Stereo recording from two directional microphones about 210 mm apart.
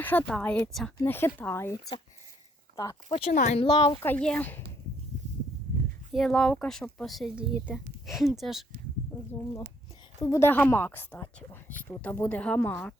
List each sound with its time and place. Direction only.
0.0 s a woman's voice: 10° left (ahead or behind)
3.2 s speech: 30° left (ahead or behind)
4.0 s a woman's voice: 5° left (ahead or behind)
6.1 s speech: centre (ahead or behind)
10.2 s a woman's voice: 15° left (ahead or behind)